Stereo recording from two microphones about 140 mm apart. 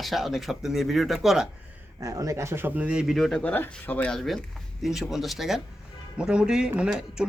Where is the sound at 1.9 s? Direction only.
25° right (ahead or behind); by 3.4 s centre (ahead or behind).